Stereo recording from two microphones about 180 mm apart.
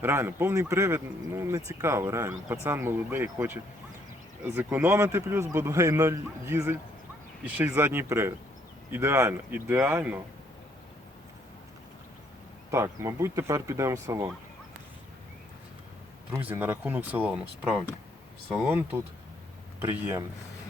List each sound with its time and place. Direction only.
0.0 s speech: 15° right (ahead or behind)
12.7 s speech: 15° right (ahead or behind)
16.5 s speech: 10° right (ahead or behind)